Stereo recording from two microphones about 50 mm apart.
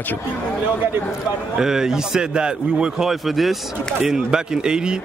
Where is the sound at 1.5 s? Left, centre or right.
Centre.